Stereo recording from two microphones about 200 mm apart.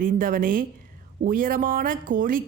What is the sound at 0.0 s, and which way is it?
A woman's voice, 45° right (ahead or behind).